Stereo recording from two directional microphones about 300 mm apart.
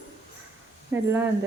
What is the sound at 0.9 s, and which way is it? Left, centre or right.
Speech, centre.